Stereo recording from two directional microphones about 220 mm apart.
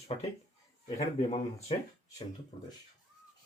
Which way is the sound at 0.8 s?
30° left (ahead or behind).